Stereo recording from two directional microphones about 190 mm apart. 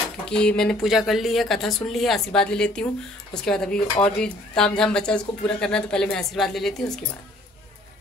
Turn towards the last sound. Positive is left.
turn(degrees=0)  # may be behind; listen again after turning